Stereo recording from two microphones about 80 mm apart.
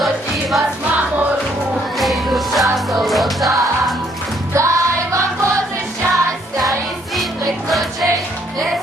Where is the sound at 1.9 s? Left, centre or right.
Centre.